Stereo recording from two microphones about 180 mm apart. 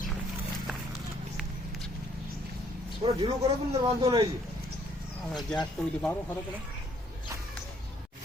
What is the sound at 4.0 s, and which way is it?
Speech, 30° right (ahead or behind).